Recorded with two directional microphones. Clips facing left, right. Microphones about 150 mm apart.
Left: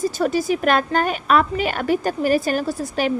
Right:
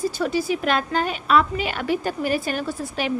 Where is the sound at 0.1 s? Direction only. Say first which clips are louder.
Left 3 dB; 45° left (ahead or behind).